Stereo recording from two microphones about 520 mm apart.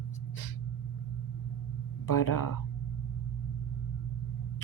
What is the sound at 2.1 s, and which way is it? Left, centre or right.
Speech, left.